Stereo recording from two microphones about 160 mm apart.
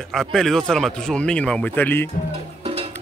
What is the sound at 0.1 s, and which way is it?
Speech, centre (ahead or behind).